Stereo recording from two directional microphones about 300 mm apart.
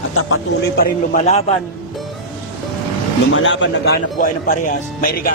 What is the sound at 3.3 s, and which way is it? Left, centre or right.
Speech, left.